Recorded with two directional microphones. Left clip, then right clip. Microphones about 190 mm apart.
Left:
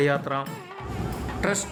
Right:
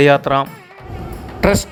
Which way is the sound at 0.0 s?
35° right (ahead or behind).